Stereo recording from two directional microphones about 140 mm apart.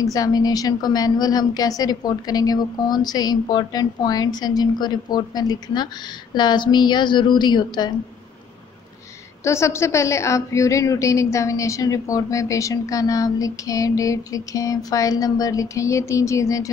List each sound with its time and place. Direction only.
0.0 s a woman's voice: 25° left (ahead or behind)
9.4 s a woman's voice: 20° left (ahead or behind)